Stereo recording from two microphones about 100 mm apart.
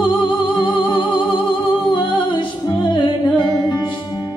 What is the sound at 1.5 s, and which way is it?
Music, 50° left (ahead or behind).